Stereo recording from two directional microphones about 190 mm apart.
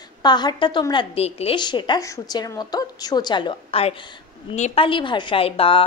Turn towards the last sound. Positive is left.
turn(degrees=30)  # may be behind; listen again after turning